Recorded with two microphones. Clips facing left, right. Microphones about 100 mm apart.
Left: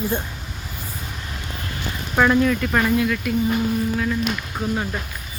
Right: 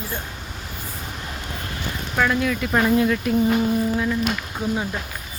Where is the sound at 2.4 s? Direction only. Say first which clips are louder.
Left 2 dB; 5° right (ahead or behind).